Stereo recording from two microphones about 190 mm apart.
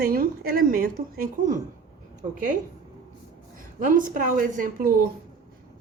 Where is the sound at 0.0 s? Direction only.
50° right (ahead or behind).